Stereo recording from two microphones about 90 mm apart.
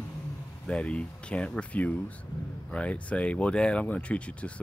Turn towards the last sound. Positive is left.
turn(degrees=15)  # may be behind; listen again after turning